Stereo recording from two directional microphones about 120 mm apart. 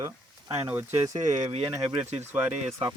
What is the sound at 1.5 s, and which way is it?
Speech, 45° right (ahead or behind).